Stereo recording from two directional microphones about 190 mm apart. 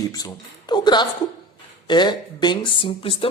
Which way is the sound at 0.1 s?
20° left (ahead or behind).